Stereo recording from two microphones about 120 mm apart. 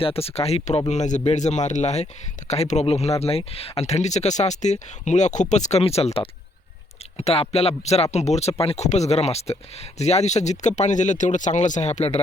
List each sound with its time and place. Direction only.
0.0 s speech: 55° left (ahead or behind)
0.9 s speech: 80° left; by 12.2 s 60° left (ahead or behind)